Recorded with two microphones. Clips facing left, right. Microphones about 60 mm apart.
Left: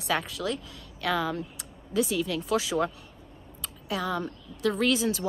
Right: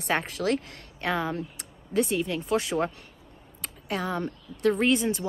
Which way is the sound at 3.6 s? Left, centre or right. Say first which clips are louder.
Even; right.